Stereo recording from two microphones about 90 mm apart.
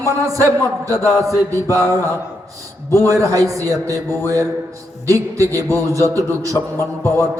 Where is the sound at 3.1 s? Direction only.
40° right (ahead or behind).